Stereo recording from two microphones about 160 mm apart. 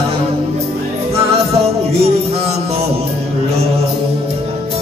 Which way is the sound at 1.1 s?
40° right (ahead or behind).